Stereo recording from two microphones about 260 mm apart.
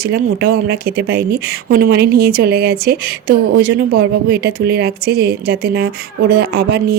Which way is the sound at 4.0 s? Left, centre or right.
Right.